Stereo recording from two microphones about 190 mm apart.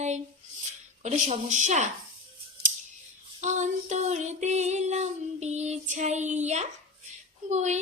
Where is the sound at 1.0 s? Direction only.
35° right (ahead or behind).